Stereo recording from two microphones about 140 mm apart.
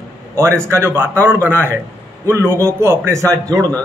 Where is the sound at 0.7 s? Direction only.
20° right (ahead or behind).